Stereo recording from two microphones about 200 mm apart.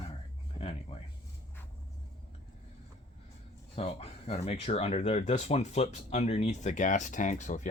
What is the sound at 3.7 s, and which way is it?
Speech, 30° left (ahead or behind).